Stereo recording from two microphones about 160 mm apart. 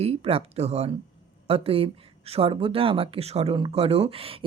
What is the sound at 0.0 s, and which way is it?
Speech, 40° right (ahead or behind).